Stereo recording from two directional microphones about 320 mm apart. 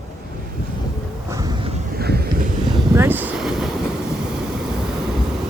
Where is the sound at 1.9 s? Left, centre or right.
Right.